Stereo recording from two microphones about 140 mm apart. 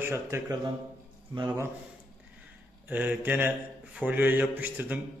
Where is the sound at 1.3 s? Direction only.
30° right (ahead or behind).